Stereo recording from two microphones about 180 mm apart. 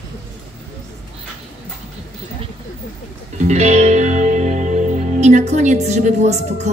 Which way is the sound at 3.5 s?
40° right (ahead or behind).